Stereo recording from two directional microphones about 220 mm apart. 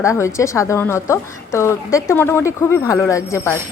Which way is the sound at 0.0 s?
15° left (ahead or behind).